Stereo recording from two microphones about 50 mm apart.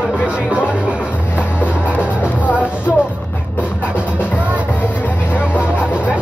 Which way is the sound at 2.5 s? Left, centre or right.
Right.